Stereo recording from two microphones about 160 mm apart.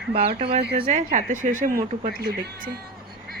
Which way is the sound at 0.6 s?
90° right.